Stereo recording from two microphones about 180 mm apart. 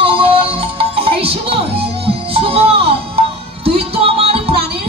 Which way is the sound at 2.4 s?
30° right (ahead or behind).